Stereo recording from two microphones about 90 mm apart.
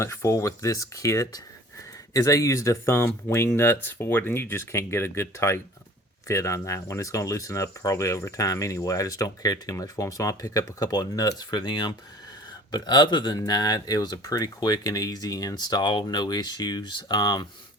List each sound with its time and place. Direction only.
0.0 s speech: 35° left (ahead or behind); by 17.4 s 50° left (ahead or behind)